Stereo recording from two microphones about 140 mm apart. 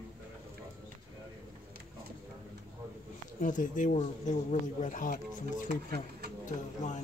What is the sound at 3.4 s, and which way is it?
Speech, 70° left (ahead or behind).